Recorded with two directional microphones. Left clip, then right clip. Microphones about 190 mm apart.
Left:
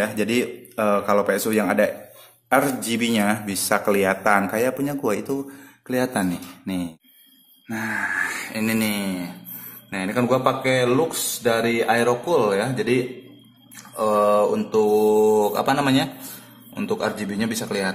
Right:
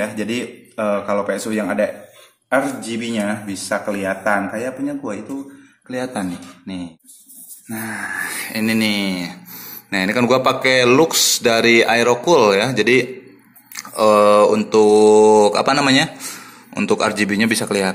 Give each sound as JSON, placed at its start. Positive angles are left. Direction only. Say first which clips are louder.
{"t": 0.0, "sound": "speech", "louder": "left 1 dB", "side_deg": 20}
{"t": 7.7, "sound": "mantra", "louder": "left 1 dB", "side_deg": 0}
{"t": 9.8, "sound": "speech", "louder": "right 6 dB", "side_deg": -20}
{"t": 13.7, "sound": "mantra", "louder": "right 7 dB", "side_deg": -20}
{"t": 16.7, "sound": "speech", "louder": "right 7 dB", "side_deg": -15}